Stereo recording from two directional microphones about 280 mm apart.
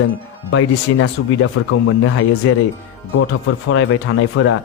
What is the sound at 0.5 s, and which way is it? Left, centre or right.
Speech, left.